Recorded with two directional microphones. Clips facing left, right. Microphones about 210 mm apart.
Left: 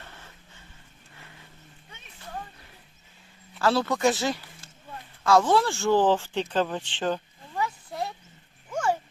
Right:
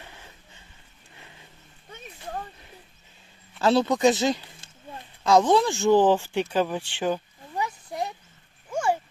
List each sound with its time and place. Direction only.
0.0 s dog: 15° right (ahead or behind)
3.6 s speech: 20° right (ahead or behind)
8.7 s dog: 10° right (ahead or behind)